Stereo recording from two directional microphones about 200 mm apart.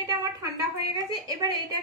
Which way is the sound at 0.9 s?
20° right (ahead or behind).